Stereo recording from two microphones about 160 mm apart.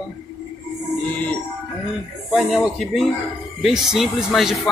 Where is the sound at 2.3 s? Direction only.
Centre (ahead or behind).